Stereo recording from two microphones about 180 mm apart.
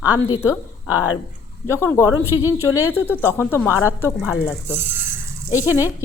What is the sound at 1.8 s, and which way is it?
Speech, 15° left (ahead or behind).